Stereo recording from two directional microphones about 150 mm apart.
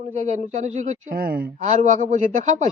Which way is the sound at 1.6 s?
55° right (ahead or behind).